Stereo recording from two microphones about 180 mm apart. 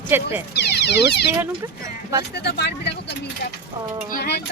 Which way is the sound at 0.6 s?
65° left (ahead or behind).